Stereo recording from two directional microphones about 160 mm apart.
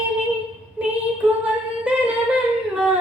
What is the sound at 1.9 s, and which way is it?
Singing, 10° right (ahead or behind).